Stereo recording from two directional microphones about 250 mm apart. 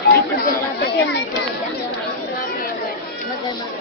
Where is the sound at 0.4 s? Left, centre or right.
Left.